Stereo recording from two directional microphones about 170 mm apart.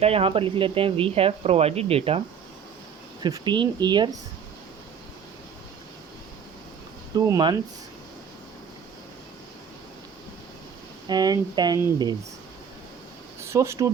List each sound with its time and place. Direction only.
0.0 s speech: 35° right (ahead or behind)
3.2 s speech: 25° right (ahead or behind)
7.2 s speech: 25° right (ahead or behind)
11.0 s speech: 25° right (ahead or behind)
13.4 s speech: 15° right (ahead or behind)